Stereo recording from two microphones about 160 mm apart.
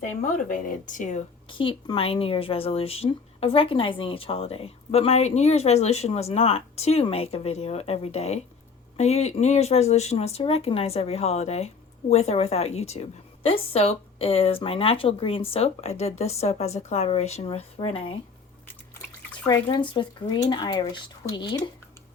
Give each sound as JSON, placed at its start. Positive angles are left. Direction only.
{"t": 0.0, "sound": "speech", "side_deg": 55}
{"t": 1.5, "sound": "speech", "side_deg": 30}
{"t": 19.5, "sound": "speech", "side_deg": 25}